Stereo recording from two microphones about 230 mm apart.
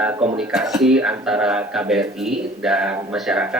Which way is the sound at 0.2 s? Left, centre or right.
Centre.